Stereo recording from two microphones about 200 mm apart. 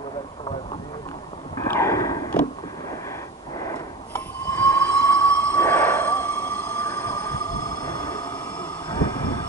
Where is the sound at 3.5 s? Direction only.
15° left (ahead or behind).